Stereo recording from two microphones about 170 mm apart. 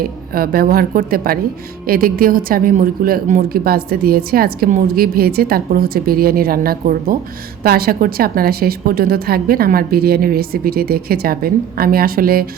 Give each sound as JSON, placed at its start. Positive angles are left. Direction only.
{"t": 0.0, "sound": "speech", "side_deg": -60}